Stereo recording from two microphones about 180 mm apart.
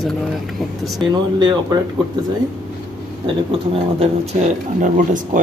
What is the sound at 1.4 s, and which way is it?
Speech, 20° right (ahead or behind).